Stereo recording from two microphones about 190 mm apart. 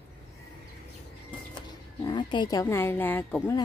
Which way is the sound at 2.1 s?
25° left (ahead or behind).